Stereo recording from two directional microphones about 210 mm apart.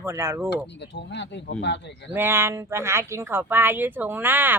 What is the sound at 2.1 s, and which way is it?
A woman's voice, 10° right (ahead or behind).